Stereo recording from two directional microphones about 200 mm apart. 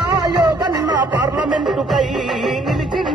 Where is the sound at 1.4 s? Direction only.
Centre (ahead or behind).